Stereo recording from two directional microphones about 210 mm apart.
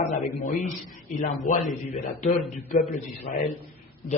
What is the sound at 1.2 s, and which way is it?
A man's voice, 35° left (ahead or behind).